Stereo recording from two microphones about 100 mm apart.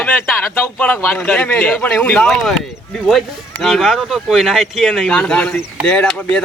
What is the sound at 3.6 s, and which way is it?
A man's voice, centre (ahead or behind).